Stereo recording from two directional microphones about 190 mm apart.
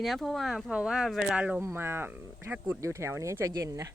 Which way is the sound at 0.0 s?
Centre (ahead or behind).